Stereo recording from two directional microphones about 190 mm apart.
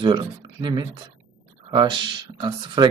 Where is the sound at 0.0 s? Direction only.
25° right (ahead or behind).